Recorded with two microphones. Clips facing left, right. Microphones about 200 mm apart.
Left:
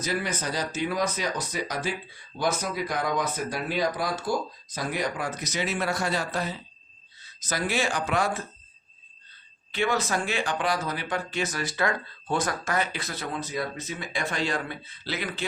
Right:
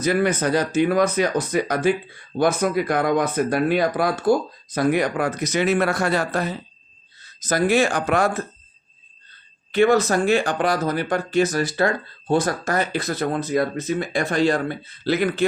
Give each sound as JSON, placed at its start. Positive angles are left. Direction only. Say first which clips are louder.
{"t": 0.0, "sound": "speech", "louder": "right 10 dB", "side_deg": -55}
{"t": 9.7, "sound": "speech", "louder": "right 10 dB", "side_deg": -45}